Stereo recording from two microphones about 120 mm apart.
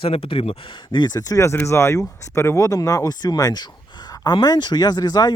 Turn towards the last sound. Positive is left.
turn(degrees=35)  # may be behind; listen again after turning